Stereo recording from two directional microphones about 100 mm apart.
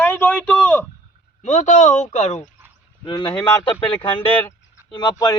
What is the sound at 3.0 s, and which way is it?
Speech, 50° left (ahead or behind).